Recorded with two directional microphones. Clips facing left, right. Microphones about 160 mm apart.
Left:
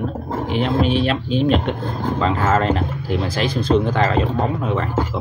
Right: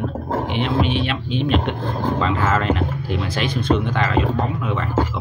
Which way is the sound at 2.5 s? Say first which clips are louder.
Left 2 dB; 35° left (ahead or behind).